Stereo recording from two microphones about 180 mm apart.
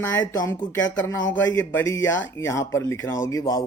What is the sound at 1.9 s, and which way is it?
Speech, 90° left.